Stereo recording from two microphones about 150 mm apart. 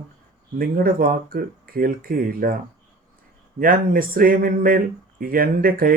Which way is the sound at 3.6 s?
70° right (ahead or behind).